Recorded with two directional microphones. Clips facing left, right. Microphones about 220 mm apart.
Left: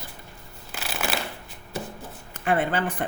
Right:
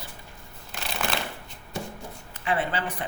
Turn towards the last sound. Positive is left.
turn(degrees=50)  # may be behind; listen again after turning